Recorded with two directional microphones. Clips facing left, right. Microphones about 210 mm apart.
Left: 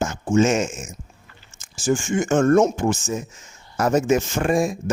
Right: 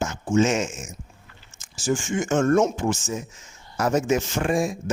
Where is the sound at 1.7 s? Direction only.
50° left (ahead or behind).